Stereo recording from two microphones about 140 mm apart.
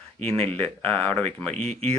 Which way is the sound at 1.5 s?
55° right (ahead or behind).